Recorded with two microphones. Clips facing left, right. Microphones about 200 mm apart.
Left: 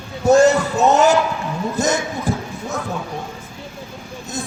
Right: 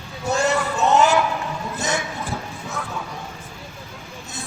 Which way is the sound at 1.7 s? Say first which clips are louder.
Left 6 dB; 40° left (ahead or behind).